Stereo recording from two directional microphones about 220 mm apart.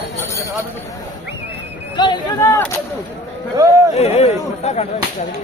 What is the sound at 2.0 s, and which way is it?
Speech, 20° left (ahead or behind).